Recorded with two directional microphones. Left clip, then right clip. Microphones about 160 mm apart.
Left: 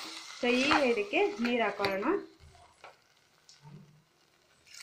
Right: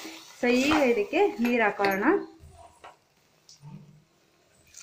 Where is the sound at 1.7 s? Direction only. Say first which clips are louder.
Right 7 dB; 15° right (ahead or behind).